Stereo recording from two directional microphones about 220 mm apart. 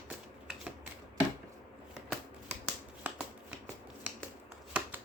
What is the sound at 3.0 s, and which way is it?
Shuffling cards, 5° right (ahead or behind).